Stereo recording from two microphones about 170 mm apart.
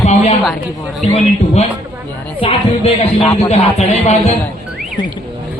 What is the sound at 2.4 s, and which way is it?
Speech, 30° left (ahead or behind).